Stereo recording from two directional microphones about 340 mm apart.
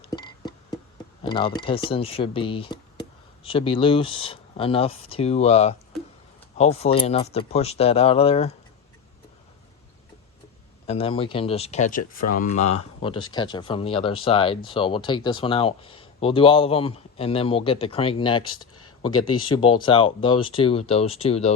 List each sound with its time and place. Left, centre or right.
0.0 s music: centre
1.2 s speech: centre
10.8 s speech: centre